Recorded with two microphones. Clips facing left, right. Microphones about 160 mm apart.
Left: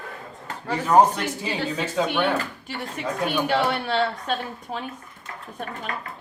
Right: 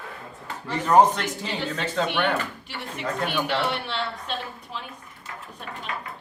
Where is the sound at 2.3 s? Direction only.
45° left (ahead or behind).